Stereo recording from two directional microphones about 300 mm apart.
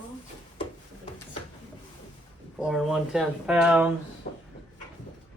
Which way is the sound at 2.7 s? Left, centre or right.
Centre.